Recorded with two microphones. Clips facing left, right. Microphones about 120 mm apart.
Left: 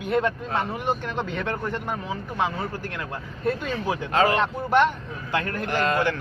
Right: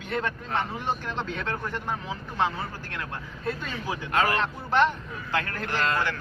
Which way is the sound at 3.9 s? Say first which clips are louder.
Left 4 dB; 25° left (ahead or behind).